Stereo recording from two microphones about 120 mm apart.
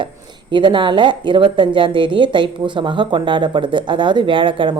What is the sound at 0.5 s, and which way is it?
A woman's voice, 40° right (ahead or behind).